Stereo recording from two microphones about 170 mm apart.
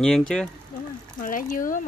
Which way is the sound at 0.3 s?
5° left (ahead or behind).